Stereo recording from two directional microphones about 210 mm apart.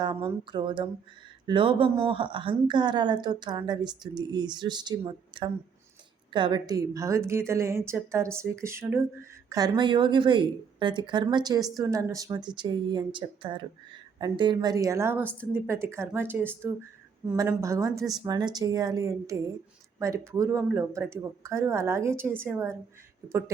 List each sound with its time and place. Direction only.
0.0 s a woman's voice: 20° right (ahead or behind)
9.5 s a woman's voice: 20° right (ahead or behind)
17.2 s speech: 10° right (ahead or behind)